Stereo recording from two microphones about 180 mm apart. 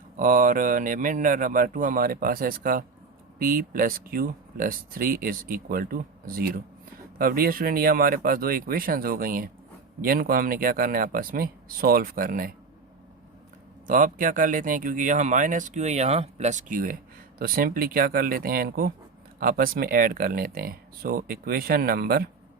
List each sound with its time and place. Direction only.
0.2 s speech: 50° right (ahead or behind)
13.8 s speech: 50° right (ahead or behind)